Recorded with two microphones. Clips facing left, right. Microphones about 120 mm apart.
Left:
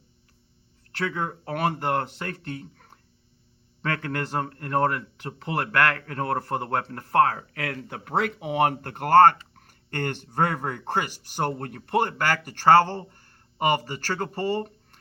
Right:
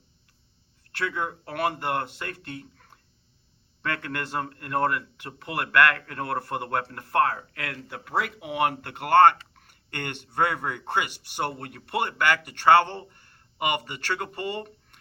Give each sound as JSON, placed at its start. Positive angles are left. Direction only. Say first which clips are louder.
{"t": 0.9, "sound": "speech", "louder": "left 1 dB", "side_deg": 40}